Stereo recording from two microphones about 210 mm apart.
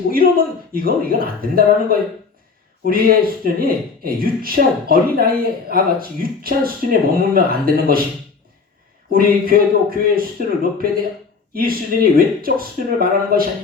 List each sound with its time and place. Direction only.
0.1 s speech: 45° right (ahead or behind)
9.0 s speech: 45° right (ahead or behind)